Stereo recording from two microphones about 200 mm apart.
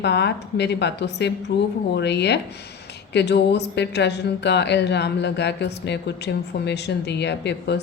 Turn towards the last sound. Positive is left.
turn(degrees=60)  # may be behind; listen again after turning